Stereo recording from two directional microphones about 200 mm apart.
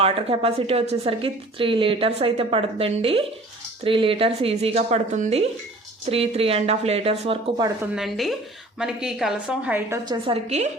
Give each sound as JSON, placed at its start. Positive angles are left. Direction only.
{"t": 0.0, "sound": "a woman's voice", "side_deg": -30}
{"t": 7.9, "sound": "a woman's voice", "side_deg": 0}
{"t": 10.2, "sound": "a woman's voice", "side_deg": -35}